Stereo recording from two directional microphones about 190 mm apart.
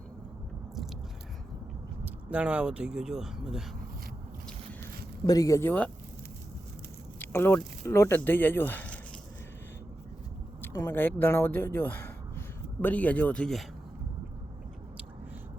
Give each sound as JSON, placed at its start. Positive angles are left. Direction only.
{"t": 2.0, "sound": "speech", "side_deg": -5}
{"t": 5.2, "sound": "speech", "side_deg": 20}
{"t": 7.2, "sound": "speech", "side_deg": 10}
{"t": 10.6, "sound": "speech", "side_deg": 10}